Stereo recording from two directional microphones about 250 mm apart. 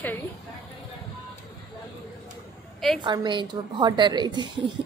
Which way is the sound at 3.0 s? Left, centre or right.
Centre.